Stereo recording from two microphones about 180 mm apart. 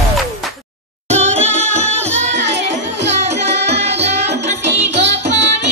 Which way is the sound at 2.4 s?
75° right (ahead or behind).